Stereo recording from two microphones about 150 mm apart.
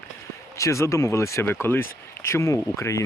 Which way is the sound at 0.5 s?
20° left (ahead or behind).